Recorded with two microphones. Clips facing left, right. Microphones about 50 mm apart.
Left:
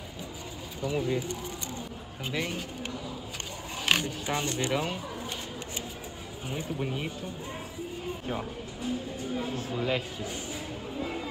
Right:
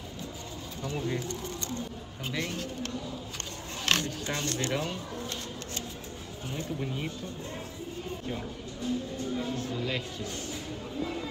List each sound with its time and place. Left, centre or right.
1.0 s speech: centre
6.5 s speech: centre
8.3 s speech: centre